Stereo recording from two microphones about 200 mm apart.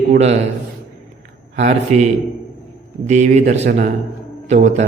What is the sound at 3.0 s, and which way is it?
Speech, 35° right (ahead or behind).